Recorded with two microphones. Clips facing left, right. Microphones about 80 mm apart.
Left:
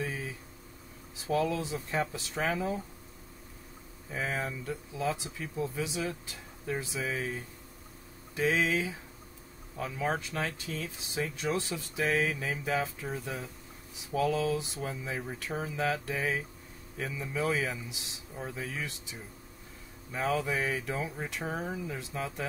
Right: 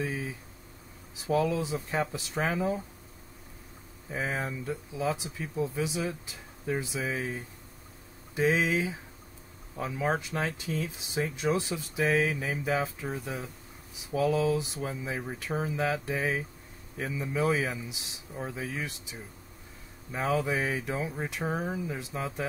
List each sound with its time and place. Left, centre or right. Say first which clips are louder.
0.0 s a sound: right 3 dB; centre
1.2 s speech: right 2 dB; centre
4.1 s speech: right 1 dB; centre
13.1 s speech: right 1 dB; centre
14.1 s speech: right 3 dB; right
20.1 s speech: right 2 dB; centre